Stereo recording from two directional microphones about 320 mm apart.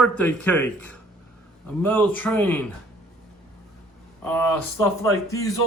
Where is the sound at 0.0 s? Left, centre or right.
Centre.